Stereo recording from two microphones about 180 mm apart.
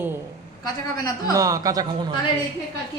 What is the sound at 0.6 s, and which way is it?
Speech, 20° left (ahead or behind).